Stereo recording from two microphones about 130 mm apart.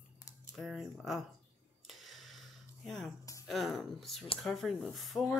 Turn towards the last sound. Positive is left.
turn(degrees=0)  # may be behind; listen again after turning